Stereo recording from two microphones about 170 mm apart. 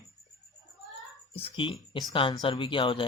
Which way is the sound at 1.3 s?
30° left (ahead or behind).